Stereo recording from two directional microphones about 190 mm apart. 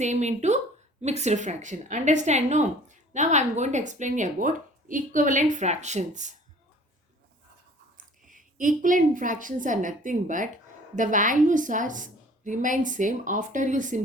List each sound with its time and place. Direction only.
0.0 s a woman's voice: 40° right (ahead or behind)
7.9 s a woman's voice: 45° right (ahead or behind)